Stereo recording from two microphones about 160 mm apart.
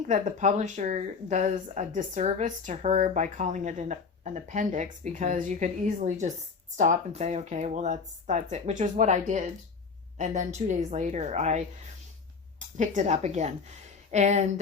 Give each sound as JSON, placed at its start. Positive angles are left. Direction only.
{"t": 0.1, "sound": "speech", "side_deg": -50}